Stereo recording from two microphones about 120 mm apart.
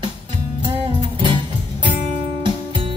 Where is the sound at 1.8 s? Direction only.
45° right (ahead or behind).